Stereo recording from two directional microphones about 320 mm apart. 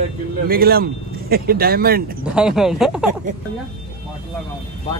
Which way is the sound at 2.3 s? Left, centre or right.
Centre.